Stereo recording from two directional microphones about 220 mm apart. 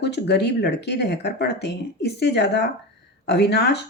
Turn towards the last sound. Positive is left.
turn(degrees=50)  # may be behind; listen again after turning